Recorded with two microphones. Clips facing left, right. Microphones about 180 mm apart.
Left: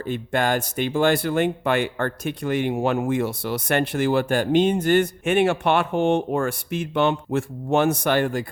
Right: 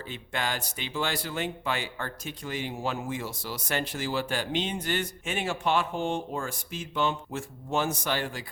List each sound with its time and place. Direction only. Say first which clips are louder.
0.0 s speech: left 10 dB; 50° left (ahead or behind)